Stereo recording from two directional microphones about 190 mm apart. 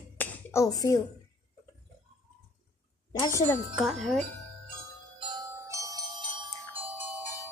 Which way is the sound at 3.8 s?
Centre (ahead or behind).